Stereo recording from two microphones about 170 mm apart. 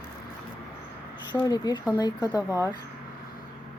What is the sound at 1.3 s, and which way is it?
A woman's voice, 25° left (ahead or behind).